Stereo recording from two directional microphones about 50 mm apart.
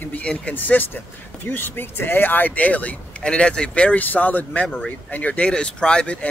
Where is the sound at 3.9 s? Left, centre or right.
Left.